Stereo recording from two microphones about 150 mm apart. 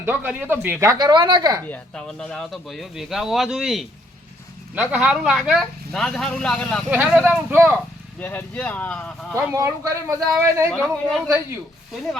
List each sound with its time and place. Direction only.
0.0 s speech: 10° right (ahead or behind)
1.6 s speech: 10° left (ahead or behind)
7.3 s speech: 15° right (ahead or behind)
8.2 s speech: 10° left (ahead or behind)
9.3 s speech: 20° right (ahead or behind)
10.7 s speech: 5° left (ahead or behind)